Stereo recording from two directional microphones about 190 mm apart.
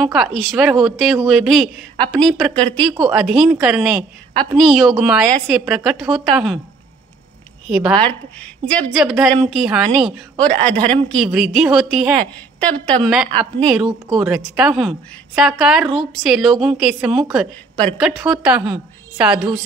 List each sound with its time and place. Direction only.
0.0 s a woman's voice: centre (ahead or behind)
7.6 s a woman's voice: 5° right (ahead or behind)